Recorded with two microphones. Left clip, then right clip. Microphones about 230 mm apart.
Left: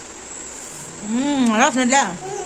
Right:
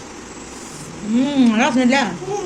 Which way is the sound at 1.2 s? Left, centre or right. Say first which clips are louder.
Even; left.